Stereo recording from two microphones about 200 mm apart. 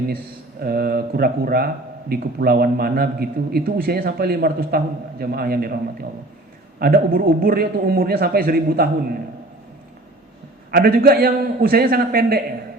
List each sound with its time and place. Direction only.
0.6 s a man's voice: 50° right (ahead or behind)
10.7 s a man's voice: 50° right (ahead or behind)